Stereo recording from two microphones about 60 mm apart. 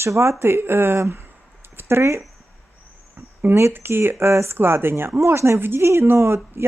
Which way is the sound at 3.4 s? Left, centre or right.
Right.